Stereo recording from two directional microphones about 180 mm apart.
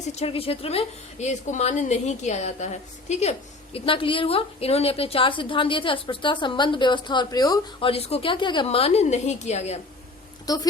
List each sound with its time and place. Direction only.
0.1 s a woman's voice: 35° left (ahead or behind)
10.4 s speech: 20° left (ahead or behind)